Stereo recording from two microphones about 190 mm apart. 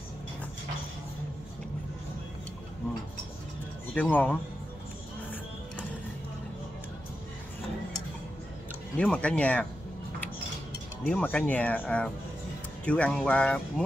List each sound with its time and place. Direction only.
3.9 s speech: 10° left (ahead or behind)
8.9 s speech: 5° left (ahead or behind)
11.1 s speech: 5° left (ahead or behind)